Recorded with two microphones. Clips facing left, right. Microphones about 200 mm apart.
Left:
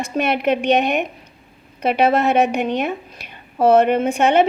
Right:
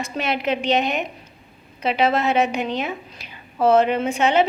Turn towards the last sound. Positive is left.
turn(degrees=55)  # may be behind; listen again after turning